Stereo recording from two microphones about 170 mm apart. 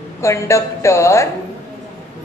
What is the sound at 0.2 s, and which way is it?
A woman's voice, 15° left (ahead or behind).